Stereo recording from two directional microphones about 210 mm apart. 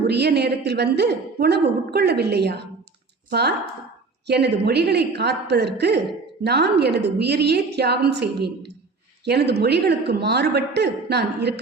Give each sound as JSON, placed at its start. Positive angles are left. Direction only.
{"t": 0.1, "sound": "a woman's voice", "side_deg": -50}